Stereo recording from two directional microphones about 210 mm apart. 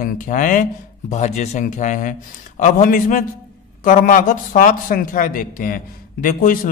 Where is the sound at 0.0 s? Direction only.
40° left (ahead or behind).